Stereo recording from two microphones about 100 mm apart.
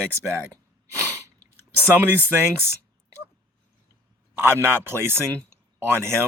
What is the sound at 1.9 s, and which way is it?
Speech, 20° right (ahead or behind).